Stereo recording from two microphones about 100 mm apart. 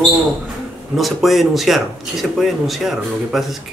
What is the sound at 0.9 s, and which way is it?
Speech, centre (ahead or behind).